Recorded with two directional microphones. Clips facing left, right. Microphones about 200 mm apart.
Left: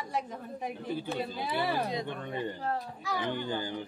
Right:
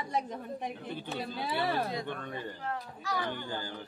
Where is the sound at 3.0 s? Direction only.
20° left (ahead or behind).